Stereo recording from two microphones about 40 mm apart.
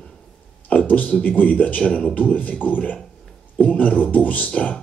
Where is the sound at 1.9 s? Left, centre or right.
Centre.